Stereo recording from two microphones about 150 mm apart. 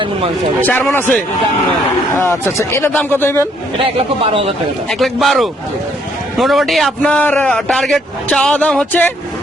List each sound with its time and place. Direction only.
0.6 s speech: 10° left (ahead or behind)
3.9 s speech: 40° right (ahead or behind)
4.9 s a man's voice: centre (ahead or behind)